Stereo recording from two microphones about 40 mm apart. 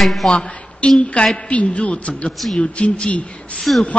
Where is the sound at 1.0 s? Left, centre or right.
Left.